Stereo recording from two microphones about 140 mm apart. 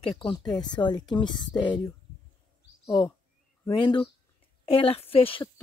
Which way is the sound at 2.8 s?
25° left (ahead or behind).